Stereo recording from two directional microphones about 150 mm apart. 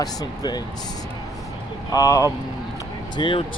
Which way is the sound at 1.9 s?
20° left (ahead or behind).